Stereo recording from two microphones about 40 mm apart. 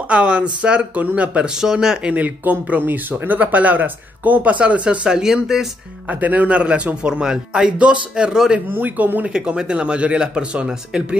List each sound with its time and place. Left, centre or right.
0.1 s speech: right
1.6 s speech: centre
2.0 s speech: right; by 5.7 s centre
6.0 s speech: right
6.5 s speech: right
8.7 s speech: right
9.3 s speech: right